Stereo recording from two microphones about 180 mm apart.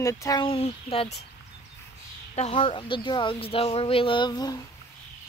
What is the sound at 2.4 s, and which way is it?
Speech, 30° left (ahead or behind).